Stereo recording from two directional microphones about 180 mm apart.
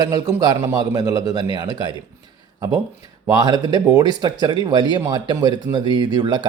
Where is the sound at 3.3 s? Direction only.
20° right (ahead or behind).